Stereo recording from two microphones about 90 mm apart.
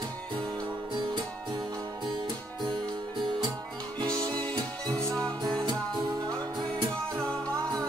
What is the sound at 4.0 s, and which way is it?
Music, 55° right (ahead or behind).